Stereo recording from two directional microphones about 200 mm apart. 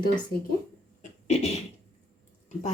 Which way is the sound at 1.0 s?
35° left (ahead or behind).